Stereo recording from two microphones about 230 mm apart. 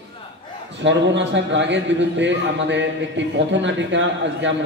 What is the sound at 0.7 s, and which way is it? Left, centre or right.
A man's voice, right.